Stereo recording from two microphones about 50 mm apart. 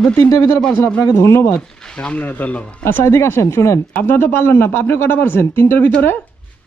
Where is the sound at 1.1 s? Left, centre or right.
Left.